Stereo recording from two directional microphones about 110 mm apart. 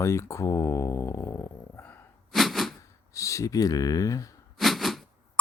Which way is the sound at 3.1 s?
30° left (ahead or behind).